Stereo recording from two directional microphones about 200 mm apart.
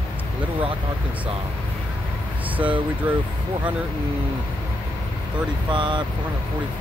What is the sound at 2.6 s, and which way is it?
Speech, 5° right (ahead or behind).